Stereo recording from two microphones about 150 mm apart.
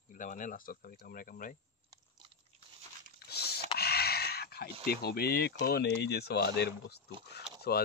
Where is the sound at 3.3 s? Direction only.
90° left.